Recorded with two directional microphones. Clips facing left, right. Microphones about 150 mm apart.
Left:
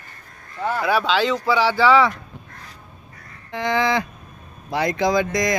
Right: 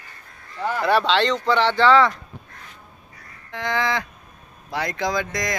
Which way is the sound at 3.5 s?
25° left (ahead or behind).